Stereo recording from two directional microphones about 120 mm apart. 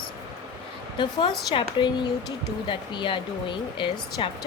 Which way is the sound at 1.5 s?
45° left (ahead or behind).